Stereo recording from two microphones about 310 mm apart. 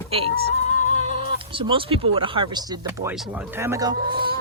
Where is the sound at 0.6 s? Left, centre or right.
Left.